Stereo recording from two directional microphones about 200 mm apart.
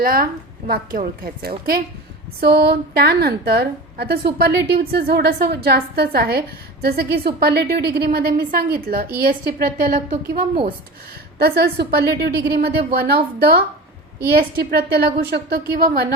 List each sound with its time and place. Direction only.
0.0 s a woman's voice: 45° right (ahead or behind)